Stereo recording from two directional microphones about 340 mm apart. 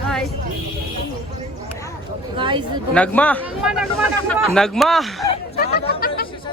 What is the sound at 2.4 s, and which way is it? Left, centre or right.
Speech, centre.